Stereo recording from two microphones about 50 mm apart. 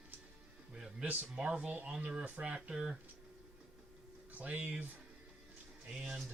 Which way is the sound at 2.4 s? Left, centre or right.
Centre.